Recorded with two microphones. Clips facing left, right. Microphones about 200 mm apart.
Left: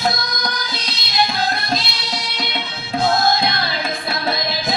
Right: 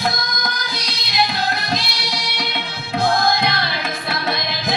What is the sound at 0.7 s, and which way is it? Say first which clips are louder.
Music: even; 15° right (ahead or behind).